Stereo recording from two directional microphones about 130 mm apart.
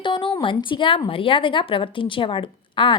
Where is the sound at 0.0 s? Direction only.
40° left (ahead or behind).